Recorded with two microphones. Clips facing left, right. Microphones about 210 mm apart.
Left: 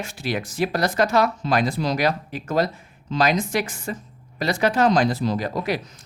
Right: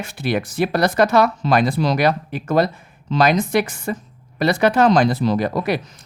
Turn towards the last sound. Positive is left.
turn(degrees=-60)  # may be behind; listen again after turning